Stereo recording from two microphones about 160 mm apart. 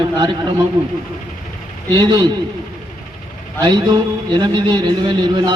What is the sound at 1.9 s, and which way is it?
Speech, 25° right (ahead or behind).